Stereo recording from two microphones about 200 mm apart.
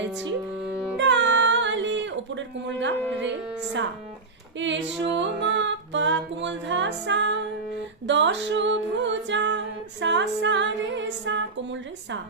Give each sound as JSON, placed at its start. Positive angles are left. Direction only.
{"t": 0.0, "sound": "music", "side_deg": -65}
{"t": 3.2, "sound": "speech", "side_deg": -65}
{"t": 5.2, "sound": "music", "side_deg": -65}